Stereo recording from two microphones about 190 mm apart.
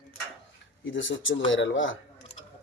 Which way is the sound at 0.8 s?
80° left.